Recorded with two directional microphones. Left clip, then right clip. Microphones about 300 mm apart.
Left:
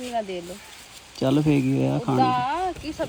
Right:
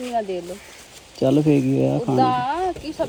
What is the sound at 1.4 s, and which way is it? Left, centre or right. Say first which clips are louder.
Speech: right 4 dB; centre.